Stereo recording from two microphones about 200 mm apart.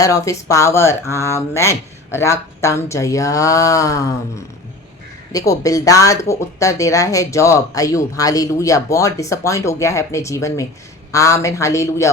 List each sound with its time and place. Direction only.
0.0 s speech: 15° left (ahead or behind)